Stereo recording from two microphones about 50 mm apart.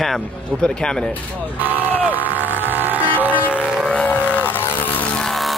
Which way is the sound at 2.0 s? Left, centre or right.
Right.